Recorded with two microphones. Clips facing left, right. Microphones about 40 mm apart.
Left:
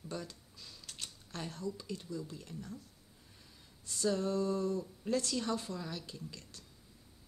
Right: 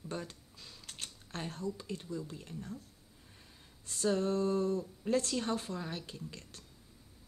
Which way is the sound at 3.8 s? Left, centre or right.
Right.